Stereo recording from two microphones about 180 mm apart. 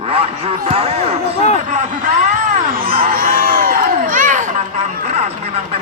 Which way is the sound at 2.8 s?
50° right (ahead or behind).